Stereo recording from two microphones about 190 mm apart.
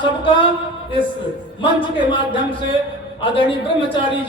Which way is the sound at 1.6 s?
25° left (ahead or behind).